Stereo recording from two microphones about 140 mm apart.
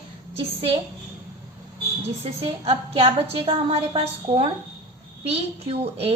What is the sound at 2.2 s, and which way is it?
A woman's voice, 40° right (ahead or behind).